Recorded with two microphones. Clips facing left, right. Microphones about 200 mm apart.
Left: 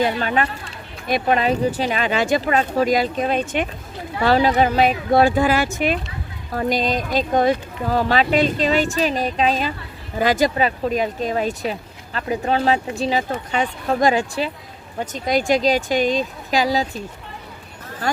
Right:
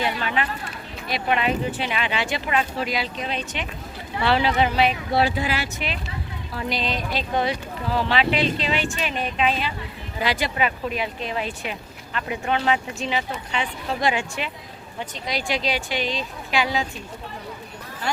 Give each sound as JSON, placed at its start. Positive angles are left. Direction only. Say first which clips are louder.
{"t": 0.0, "sound": "speech", "louder": "left 5 dB", "side_deg": 40}